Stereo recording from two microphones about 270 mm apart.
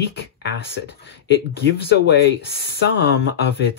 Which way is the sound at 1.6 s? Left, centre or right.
Left.